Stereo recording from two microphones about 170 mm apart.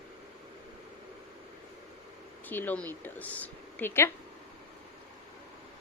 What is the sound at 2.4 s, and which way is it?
A woman's voice, 10° left (ahead or behind).